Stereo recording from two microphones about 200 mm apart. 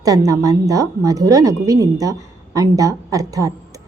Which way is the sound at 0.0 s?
15° right (ahead or behind).